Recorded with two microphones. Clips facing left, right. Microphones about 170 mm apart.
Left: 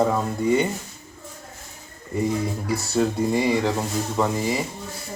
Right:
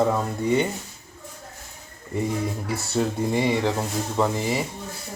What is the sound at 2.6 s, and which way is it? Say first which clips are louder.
Speech: left 3 dB; 25° right (ahead or behind).